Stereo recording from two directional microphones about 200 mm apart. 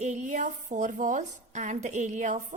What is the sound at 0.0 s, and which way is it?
A woman's voice, 35° right (ahead or behind).